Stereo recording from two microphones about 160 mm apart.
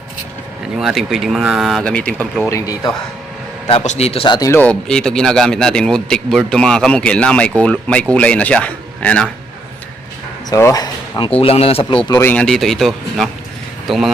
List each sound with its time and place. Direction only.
0.8 s a man's voice: centre (ahead or behind)
2.5 s speech: 20° left (ahead or behind)
3.7 s a man's voice: 40° left (ahead or behind)
4.4 s speech: 20° left (ahead or behind)
4.6 s a man's voice: 5° left (ahead or behind)
10.5 s speech: 20° left (ahead or behind)
11.3 s a man's voice: 40° left (ahead or behind)
12.0 s speech: 20° left (ahead or behind)
12.3 s a man's voice: 5° left (ahead or behind)